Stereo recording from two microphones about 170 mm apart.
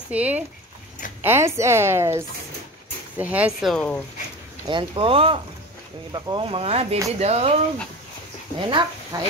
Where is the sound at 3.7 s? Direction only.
5° left (ahead or behind).